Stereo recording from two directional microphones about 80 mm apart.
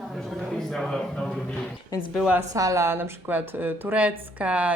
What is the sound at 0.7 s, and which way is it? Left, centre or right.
Speech, centre.